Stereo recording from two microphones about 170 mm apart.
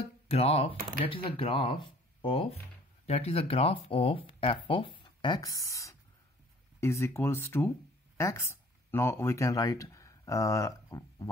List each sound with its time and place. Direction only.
0.3 s speech: 35° left (ahead or behind); by 11.2 s 20° left (ahead or behind)